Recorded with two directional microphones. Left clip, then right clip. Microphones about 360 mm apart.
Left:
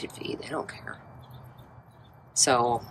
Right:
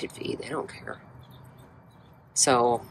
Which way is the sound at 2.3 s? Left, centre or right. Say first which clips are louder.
Right 1 dB; centre.